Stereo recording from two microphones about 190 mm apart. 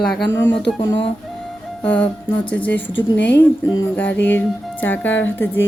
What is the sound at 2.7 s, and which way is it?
Speech, 65° left (ahead or behind).